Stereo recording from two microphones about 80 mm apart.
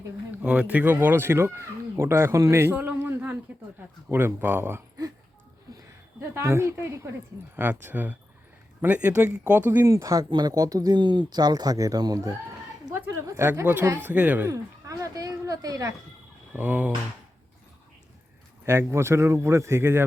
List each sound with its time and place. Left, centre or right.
0.3 s speech: centre; by 2.7 s right
2.7 s a sound: right
4.1 s speech: right
5.7 s a sound: right
6.1 s speech: right
9.8 s speech: right
10.2 s speech: right
11.0 s a woman's voice: right
13.4 s speech: right
14.5 s speech: right
16.5 s fowl: right
18.6 s speech: right